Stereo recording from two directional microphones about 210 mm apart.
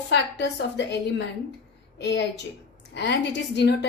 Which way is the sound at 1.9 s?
55° left (ahead or behind).